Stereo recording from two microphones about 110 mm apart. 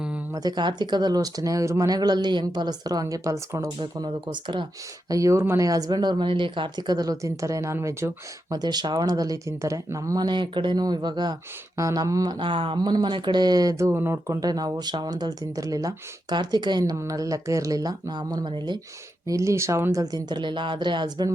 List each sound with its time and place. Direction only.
0.3 s speech: 40° right (ahead or behind)
3.8 s speech: 45° right (ahead or behind)
5.0 s speech: 30° right (ahead or behind)
8.4 s speech: 40° right (ahead or behind)
10.2 s speech: 45° right (ahead or behind)
11.8 s speech: 30° right (ahead or behind)
12.4 s speech: 50° right (ahead or behind); by 14.3 s 20° right (ahead or behind)
14.4 s speech: 35° right (ahead or behind)
19.3 s speech: 25° right (ahead or behind); by 21.2 s 45° right (ahead or behind)